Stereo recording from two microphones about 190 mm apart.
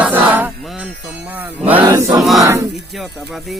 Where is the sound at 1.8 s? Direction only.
20° right (ahead or behind).